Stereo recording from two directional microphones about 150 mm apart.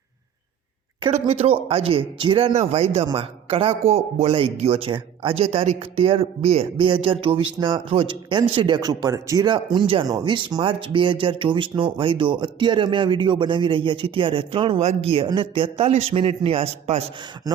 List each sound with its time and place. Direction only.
1.1 s speech: 45° right (ahead or behind)